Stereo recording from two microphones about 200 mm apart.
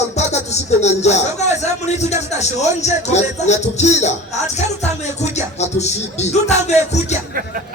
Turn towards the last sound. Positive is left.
turn(degrees=35)  # may be behind; listen again after turning